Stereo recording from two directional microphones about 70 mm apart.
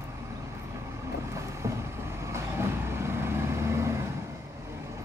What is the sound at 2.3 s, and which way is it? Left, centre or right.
Vehicle, right.